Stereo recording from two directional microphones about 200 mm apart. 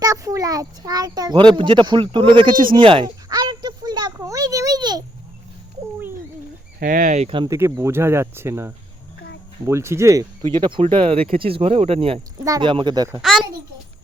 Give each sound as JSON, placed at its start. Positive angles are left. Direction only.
{"t": 0.0, "sound": "a child's voice", "side_deg": -15}
{"t": 2.6, "sound": "a sound", "side_deg": -25}
{"t": 6.7, "sound": "speech", "side_deg": -45}
{"t": 7.5, "sound": "speech", "side_deg": -15}